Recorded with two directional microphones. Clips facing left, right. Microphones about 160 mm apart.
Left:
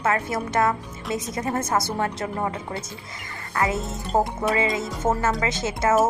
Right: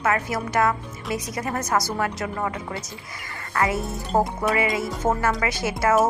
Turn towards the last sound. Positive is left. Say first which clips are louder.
# even
turn(degrees=20)  # may be behind; listen again after turning